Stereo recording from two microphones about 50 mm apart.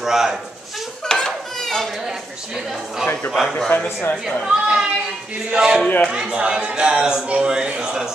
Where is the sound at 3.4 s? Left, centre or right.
Centre.